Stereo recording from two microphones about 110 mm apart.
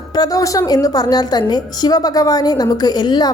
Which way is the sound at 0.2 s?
30° left (ahead or behind).